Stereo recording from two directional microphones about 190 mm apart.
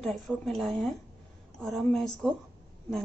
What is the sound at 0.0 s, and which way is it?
A woman's voice, centre (ahead or behind).